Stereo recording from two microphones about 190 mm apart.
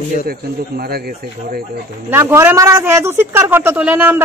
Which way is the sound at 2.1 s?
15° right (ahead or behind).